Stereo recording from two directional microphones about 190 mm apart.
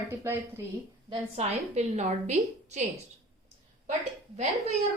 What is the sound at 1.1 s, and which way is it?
A woman's voice, 35° right (ahead or behind).